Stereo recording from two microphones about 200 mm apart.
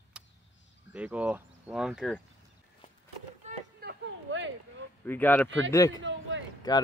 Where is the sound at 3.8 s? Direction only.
60° right (ahead or behind).